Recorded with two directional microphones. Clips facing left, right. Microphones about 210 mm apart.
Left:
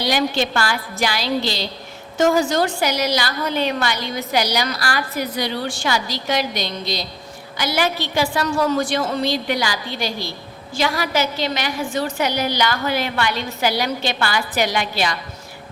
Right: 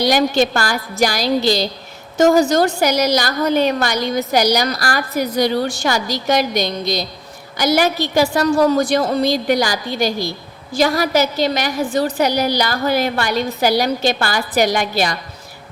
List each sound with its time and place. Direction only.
0.0 s a woman's voice: 45° right (ahead or behind)